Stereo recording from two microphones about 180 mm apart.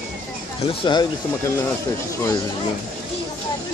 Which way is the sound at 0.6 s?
30° left (ahead or behind).